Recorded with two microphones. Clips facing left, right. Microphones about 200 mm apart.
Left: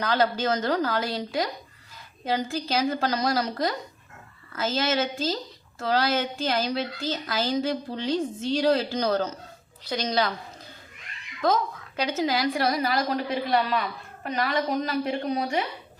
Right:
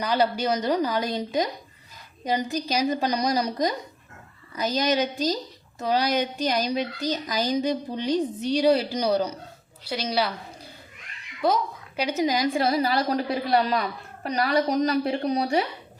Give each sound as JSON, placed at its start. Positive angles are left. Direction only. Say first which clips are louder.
{"t": 0.0, "sound": "a woman's voice", "louder": "right 1 dB", "side_deg": -10}
{"t": 11.4, "sound": "a woman's voice", "louder": "even", "side_deg": -10}
{"t": 12.6, "sound": "a woman's voice", "louder": "right 2 dB", "side_deg": -30}